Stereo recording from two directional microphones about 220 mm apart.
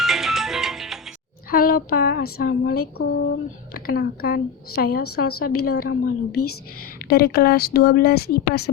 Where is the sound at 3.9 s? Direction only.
45° left (ahead or behind).